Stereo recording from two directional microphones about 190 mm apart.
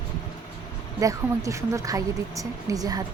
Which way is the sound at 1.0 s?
15° right (ahead or behind).